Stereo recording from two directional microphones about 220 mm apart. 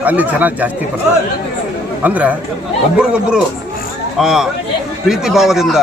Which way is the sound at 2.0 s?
5° right (ahead or behind).